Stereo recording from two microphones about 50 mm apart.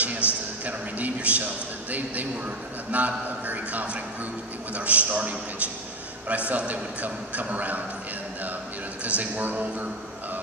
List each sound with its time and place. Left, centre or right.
0.2 s a sound: left
0.7 s a man's voice: right
9.0 s a man's voice: right